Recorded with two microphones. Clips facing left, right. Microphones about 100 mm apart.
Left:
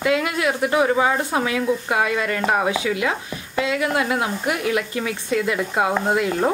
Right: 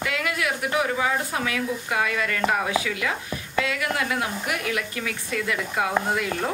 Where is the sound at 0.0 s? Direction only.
25° left (ahead or behind).